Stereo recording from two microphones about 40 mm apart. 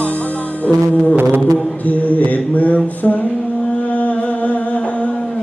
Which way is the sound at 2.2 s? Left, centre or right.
Left.